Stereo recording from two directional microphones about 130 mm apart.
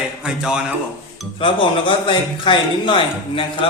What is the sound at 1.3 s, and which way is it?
A man's voice, 40° left (ahead or behind).